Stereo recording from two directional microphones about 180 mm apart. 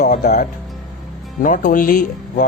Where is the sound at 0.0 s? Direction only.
45° left (ahead or behind).